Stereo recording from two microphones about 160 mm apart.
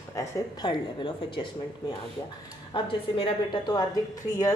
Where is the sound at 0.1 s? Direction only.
20° left (ahead or behind).